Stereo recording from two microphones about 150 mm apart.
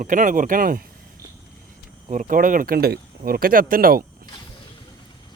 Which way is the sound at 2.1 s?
60° right (ahead or behind).